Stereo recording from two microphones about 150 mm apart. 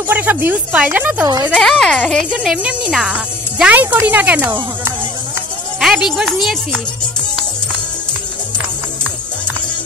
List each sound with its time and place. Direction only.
0.1 s speech: 10° right (ahead or behind)
1.2 s speech: 25° right (ahead or behind)
1.5 s speech: centre (ahead or behind)
5.8 s speech: 5° right (ahead or behind)